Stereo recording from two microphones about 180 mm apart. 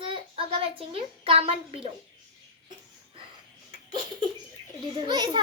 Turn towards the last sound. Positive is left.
turn(degrees=-25)  # may be behind; listen again after turning